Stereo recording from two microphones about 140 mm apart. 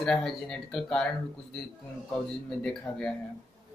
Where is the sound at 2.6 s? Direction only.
5° left (ahead or behind).